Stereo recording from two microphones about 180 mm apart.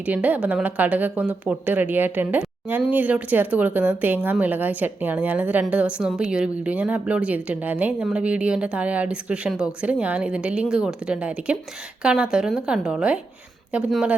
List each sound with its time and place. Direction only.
0.0 s a woman's voice: 10° right (ahead or behind)